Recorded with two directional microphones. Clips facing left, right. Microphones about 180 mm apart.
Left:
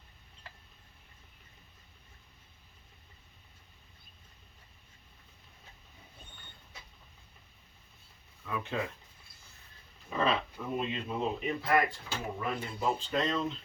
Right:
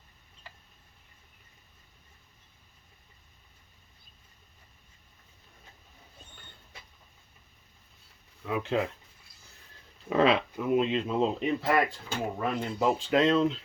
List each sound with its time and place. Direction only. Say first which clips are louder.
8.4 s speech: right 7 dB; 90° right
10.1 s speech: right 7 dB; 90° right
12.0 s speech: right 5 dB; 55° right (ahead or behind)
12.8 s speech: right 7 dB; 85° right